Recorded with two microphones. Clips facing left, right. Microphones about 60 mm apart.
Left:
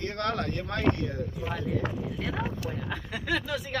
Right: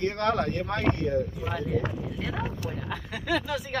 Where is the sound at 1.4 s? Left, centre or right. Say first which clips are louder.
Right 2 dB; centre.